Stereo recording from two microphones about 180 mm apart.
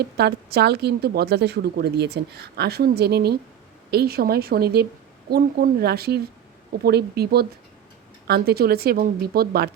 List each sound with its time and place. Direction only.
0.0 s a woman's voice: 65° right (ahead or behind)